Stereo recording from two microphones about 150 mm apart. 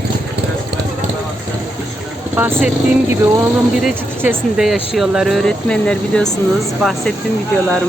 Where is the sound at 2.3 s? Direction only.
15° right (ahead or behind).